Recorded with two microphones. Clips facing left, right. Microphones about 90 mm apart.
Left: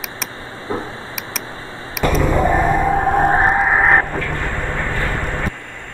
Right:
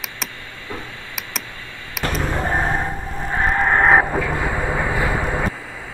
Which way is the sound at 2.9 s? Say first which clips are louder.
Left 14 dB; 70° left (ahead or behind).